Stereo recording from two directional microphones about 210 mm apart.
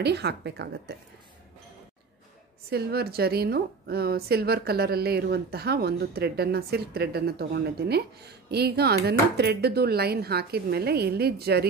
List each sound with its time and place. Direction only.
0.0 s a woman's voice: 50° right (ahead or behind)
2.7 s a woman's voice: 50° right (ahead or behind)